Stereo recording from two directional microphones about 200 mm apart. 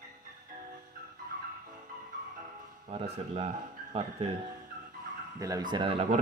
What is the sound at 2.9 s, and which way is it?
Speech, 30° right (ahead or behind).